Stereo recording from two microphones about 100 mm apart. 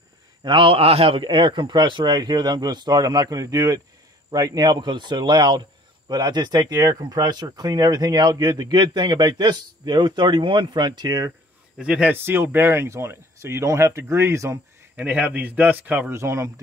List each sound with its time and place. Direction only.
0.4 s speech: 50° right (ahead or behind)
11.8 s speech: 10° right (ahead or behind)
12.1 s speech: 25° right (ahead or behind)
15.0 s speech: 15° right (ahead or behind)
16.1 s speech: 30° right (ahead or behind)